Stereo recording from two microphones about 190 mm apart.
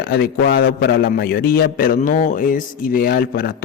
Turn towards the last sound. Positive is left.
turn(degrees=50)  # may be behind; listen again after turning